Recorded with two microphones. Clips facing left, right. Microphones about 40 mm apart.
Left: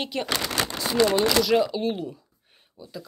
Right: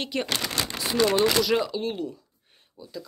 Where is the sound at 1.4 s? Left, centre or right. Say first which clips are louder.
Left 3 dB; centre.